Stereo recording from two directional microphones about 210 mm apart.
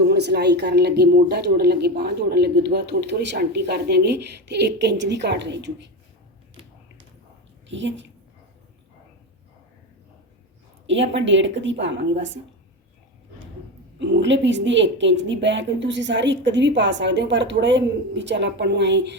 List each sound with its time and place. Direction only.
0.0 s a woman's voice: 50° right (ahead or behind)
7.7 s a woman's voice: 60° right (ahead or behind)
10.8 s a woman's voice: 60° right (ahead or behind)
14.0 s a woman's voice: 55° right (ahead or behind)